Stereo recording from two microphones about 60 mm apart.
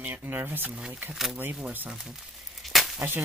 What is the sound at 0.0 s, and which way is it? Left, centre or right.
Speech, right.